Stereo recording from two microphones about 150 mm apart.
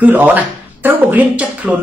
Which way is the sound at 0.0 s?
10° right (ahead or behind).